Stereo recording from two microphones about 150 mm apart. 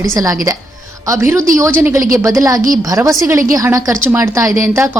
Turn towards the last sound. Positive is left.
turn(degrees=-20)  # may be behind; listen again after turning